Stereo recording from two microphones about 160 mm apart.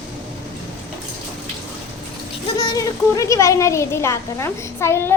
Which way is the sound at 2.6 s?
20° left (ahead or behind).